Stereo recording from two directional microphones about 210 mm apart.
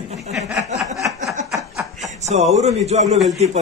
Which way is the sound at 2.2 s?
35° right (ahead or behind).